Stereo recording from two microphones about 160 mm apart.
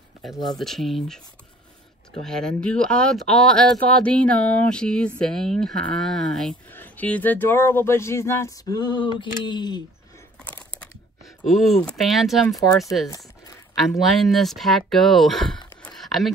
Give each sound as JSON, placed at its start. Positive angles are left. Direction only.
{"t": 0.2, "sound": "speech", "side_deg": 0}
{"t": 2.2, "sound": "speech", "side_deg": 5}
{"t": 10.4, "sound": "a sound", "side_deg": 10}
{"t": 11.4, "sound": "speech", "side_deg": 0}
{"t": 12.4, "sound": "speech", "side_deg": 20}
{"t": 13.8, "sound": "speech", "side_deg": 0}